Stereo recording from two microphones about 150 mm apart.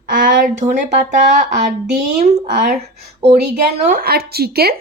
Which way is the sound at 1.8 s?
90° right.